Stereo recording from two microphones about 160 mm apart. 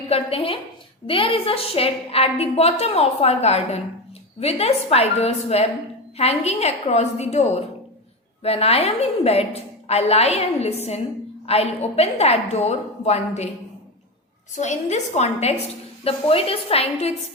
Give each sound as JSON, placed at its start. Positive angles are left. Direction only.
{"t": 0.1, "sound": "a woman's voice", "side_deg": 35}
{"t": 14.5, "sound": "a woman's voice", "side_deg": 45}